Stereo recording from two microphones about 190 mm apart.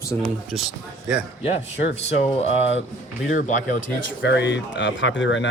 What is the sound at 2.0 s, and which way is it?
Speech, 35° left (ahead or behind).